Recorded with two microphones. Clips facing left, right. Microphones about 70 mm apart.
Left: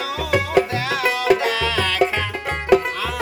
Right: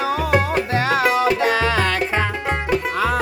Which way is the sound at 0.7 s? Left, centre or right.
Right.